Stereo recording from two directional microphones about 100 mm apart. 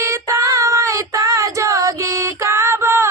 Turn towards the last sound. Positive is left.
turn(degrees=-25)  # may be behind; listen again after turning